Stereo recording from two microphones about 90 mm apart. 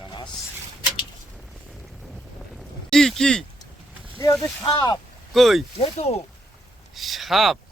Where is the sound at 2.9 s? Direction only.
5° left (ahead or behind).